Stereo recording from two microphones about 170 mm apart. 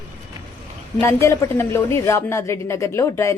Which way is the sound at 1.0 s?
15° left (ahead or behind).